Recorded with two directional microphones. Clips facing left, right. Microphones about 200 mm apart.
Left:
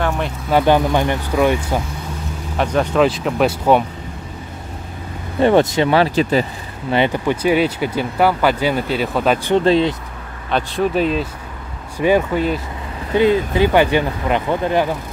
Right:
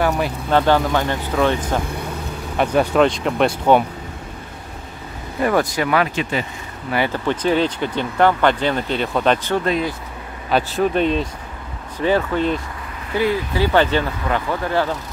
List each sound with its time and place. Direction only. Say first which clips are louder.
0.5 s speech: left 2 dB; 15° left (ahead or behind)
2.5 s speech: right 1 dB; 5° right (ahead or behind)
3.0 s speech: left 2 dB; 5° left (ahead or behind)
5.4 s speech: left 5 dB; 25° left (ahead or behind)
6.9 s speech: left 4 dB; 20° left (ahead or behind)
7.2 s speech: left 2 dB; 10° left (ahead or behind)
9.7 s speech: left 7 dB; 25° left (ahead or behind)
10.5 s speech: even; centre (ahead or behind)
12.0 s speech: left 3 dB; 15° left (ahead or behind)
13.1 s speech: left 5 dB; 20° left (ahead or behind)